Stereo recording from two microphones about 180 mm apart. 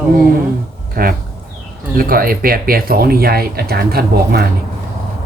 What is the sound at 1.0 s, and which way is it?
Speech, 55° right (ahead or behind).